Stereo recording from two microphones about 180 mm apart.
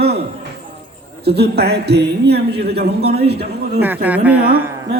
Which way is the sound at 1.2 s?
65° right (ahead or behind).